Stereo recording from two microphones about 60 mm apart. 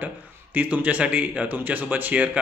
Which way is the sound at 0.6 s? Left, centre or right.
Right.